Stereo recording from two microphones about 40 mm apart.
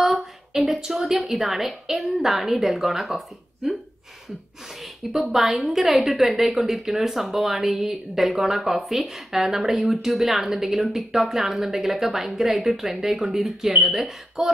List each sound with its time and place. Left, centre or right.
0.0 s a sound: centre
0.7 s a woman's voice: centre
5.1 s a woman's voice: centre